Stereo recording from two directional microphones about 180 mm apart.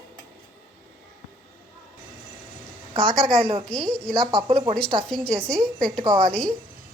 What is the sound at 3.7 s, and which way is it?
A woman's voice, 5° left (ahead or behind).